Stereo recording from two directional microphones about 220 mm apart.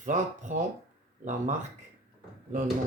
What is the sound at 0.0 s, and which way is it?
Speech, 35° right (ahead or behind).